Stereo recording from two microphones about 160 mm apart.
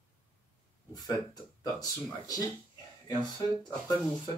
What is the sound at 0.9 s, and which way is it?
Speech, 25° left (ahead or behind).